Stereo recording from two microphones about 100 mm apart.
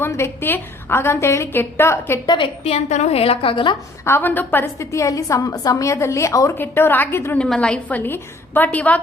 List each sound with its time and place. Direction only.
0.0 s a woman's voice: 25° left (ahead or behind)
2.2 s a woman's voice: 45° left (ahead or behind)
2.6 s a woman's voice: 90° left; by 3.8 s 55° left (ahead or behind)
4.0 s a woman's voice: 20° left (ahead or behind)
7.3 s a woman's voice: 5° left (ahead or behind)